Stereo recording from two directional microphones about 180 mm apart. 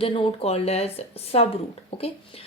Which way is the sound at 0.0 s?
30° left (ahead or behind).